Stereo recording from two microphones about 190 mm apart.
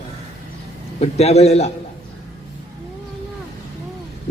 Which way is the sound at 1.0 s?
35° left (ahead or behind).